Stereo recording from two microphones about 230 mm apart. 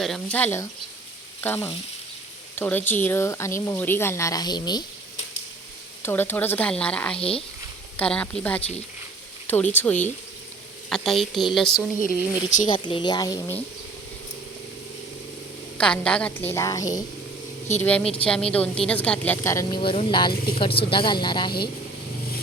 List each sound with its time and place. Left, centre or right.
0.0 s speech: centre
6.0 s speech: centre
7.2 s a woman's voice: left
7.9 s a woman's voice: centre
12.0 s speech: left
12.6 s a woman's voice: centre
15.8 s a woman's voice: centre